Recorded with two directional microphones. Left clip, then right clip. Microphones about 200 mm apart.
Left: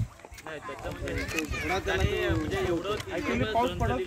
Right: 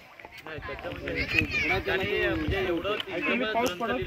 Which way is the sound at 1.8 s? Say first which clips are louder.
Right 2 dB; 30° right (ahead or behind).